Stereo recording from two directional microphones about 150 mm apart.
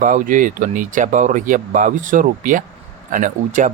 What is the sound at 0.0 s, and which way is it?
Speech, 60° right (ahead or behind).